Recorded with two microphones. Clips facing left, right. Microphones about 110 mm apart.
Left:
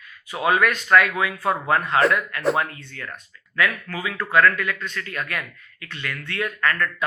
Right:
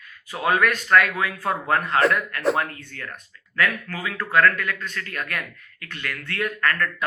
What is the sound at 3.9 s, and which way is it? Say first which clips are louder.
Speech: left 1 dB; 20° left (ahead or behind).